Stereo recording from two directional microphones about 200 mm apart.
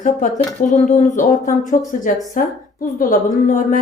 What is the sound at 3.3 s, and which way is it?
Speech, 40° left (ahead or behind).